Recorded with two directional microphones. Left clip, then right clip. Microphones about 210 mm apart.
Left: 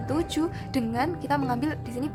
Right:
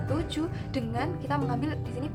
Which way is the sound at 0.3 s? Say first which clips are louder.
Left 4 dB; 40° left (ahead or behind).